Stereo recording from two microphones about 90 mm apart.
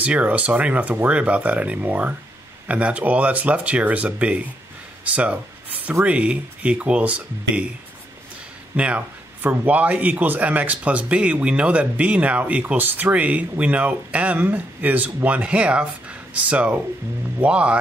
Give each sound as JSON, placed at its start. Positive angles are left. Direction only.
{"t": 0.0, "sound": "a man's voice", "side_deg": -15}
{"t": 8.7, "sound": "a man's voice", "side_deg": -15}